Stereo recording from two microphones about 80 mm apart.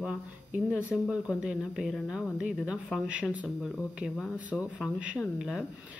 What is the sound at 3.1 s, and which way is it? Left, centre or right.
Speech, centre.